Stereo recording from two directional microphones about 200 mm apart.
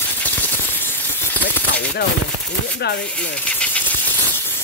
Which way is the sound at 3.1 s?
5° left (ahead or behind).